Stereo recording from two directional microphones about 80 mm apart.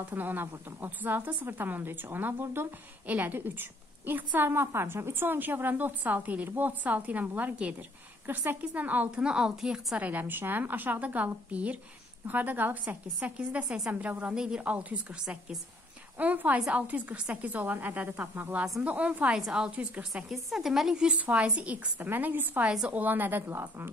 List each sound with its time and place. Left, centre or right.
0.1 s a woman's voice: right
9.2 s a woman's voice: centre
9.9 s a woman's voice: right
16.2 s a woman's voice: right
20.2 s a woman's voice: centre; by 23.9 s right